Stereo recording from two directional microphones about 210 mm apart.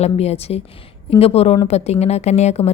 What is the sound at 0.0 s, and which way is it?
A woman's voice, 30° left (ahead or behind).